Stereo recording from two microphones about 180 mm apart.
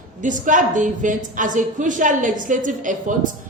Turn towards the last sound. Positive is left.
turn(degrees=-45)  # may be behind; listen again after turning